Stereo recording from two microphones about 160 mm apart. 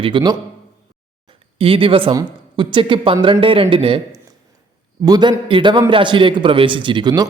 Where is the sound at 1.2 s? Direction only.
35° right (ahead or behind).